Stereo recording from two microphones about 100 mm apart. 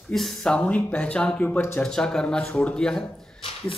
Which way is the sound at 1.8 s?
5° left (ahead or behind).